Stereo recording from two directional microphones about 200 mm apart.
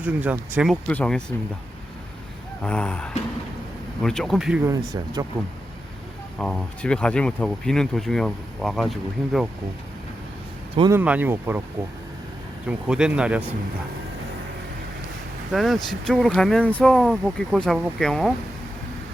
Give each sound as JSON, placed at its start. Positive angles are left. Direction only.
{"t": 0.0, "sound": "speech", "side_deg": -10}
{"t": 2.6, "sound": "speech", "side_deg": 5}
{"t": 4.7, "sound": "speech", "side_deg": -20}
{"t": 6.4, "sound": "speech", "side_deg": 5}
{"t": 10.8, "sound": "speech", "side_deg": -20}
{"t": 12.6, "sound": "speech", "side_deg": -5}
{"t": 15.5, "sound": "speech", "side_deg": 0}